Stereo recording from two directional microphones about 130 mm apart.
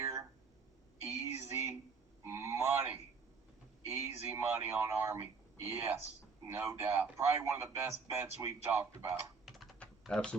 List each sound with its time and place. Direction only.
0.0 s a sound: 25° right (ahead or behind)
3.8 s a man's voice: 20° right (ahead or behind)
9.5 s typing: centre (ahead or behind)